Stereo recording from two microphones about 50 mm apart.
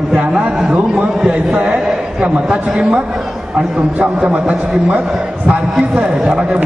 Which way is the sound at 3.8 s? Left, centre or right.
Right.